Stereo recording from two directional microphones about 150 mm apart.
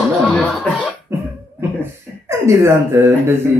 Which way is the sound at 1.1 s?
15° right (ahead or behind).